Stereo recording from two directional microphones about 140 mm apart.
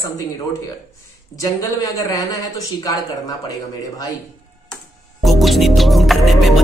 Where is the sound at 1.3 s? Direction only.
25° left (ahead or behind).